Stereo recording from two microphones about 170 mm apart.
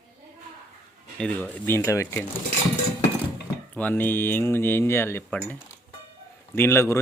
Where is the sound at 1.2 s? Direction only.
10° left (ahead or behind).